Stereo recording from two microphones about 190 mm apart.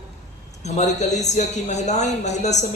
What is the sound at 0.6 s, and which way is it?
A man's voice, 35° left (ahead or behind).